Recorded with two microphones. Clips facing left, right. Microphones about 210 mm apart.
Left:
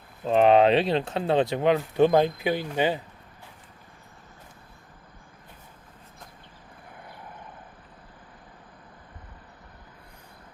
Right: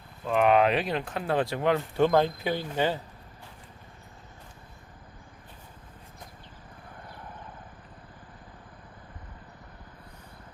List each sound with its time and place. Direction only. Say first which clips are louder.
0.3 s speech: left 4 dB; 30° left (ahead or behind)